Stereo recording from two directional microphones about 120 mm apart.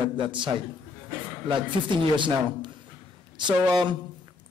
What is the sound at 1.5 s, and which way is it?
Speech, 40° right (ahead or behind).